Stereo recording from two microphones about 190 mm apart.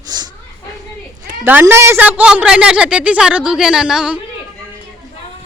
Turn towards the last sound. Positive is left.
turn(degrees=-5)  # may be behind; listen again after turning